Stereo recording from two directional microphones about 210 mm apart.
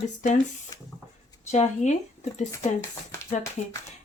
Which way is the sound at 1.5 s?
35° left (ahead or behind).